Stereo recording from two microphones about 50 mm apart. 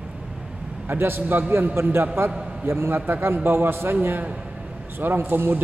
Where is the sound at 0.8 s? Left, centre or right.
Right.